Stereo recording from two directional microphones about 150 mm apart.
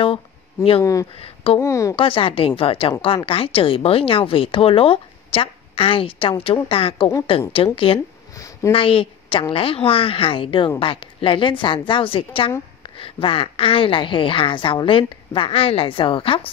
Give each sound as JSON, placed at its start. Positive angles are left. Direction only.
{"t": 1.1, "sound": "speech", "side_deg": 40}
{"t": 1.6, "sound": "speech", "side_deg": 20}
{"t": 2.0, "sound": "speech", "side_deg": 35}
{"t": 8.4, "sound": "a sound", "side_deg": 20}
{"t": 8.7, "sound": "speech", "side_deg": 35}